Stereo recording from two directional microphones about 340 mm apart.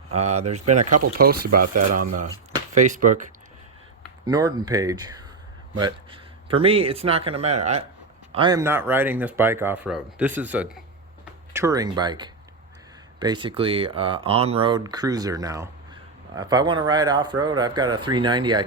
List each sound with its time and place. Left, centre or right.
0.1 s speech: centre
0.6 s speech: right
1.2 s speech: right
2.7 s speech: right
4.3 s speech: centre